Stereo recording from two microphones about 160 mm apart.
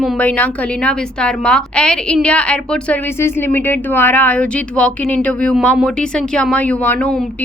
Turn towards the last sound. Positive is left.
turn(degrees=10)  # may be behind; listen again after turning